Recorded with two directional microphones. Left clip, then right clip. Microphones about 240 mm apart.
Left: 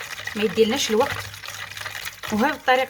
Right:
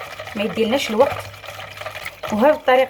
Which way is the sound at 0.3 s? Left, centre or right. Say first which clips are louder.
Even; left.